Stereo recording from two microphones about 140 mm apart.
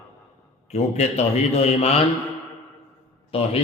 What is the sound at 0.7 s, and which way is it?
A man's voice, 50° left (ahead or behind).